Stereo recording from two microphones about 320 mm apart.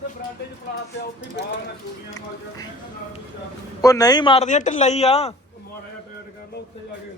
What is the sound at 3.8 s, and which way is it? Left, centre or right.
A man's voice, centre.